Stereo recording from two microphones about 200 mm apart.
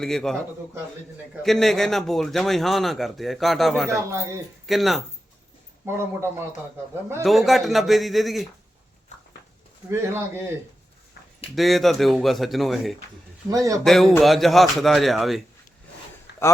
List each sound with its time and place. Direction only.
0.0 s a man's voice: centre (ahead or behind)
1.5 s a man's voice: centre (ahead or behind)
4.1 s a man's voice: 15° right (ahead or behind)
4.6 s a man's voice: centre (ahead or behind)
5.8 s a man's voice: 10° right (ahead or behind)
7.2 s a man's voice: centre (ahead or behind)
9.9 s a man's voice: 15° right (ahead or behind)
11.5 s a man's voice: centre (ahead or behind)
13.5 s a man's voice: 15° right (ahead or behind)
13.8 s a man's voice: centre (ahead or behind)